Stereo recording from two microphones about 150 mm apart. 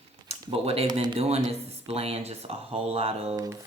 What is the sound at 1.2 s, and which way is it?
Speech, 45° right (ahead or behind).